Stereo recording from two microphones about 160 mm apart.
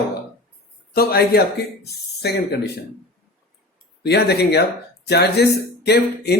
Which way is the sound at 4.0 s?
90° left.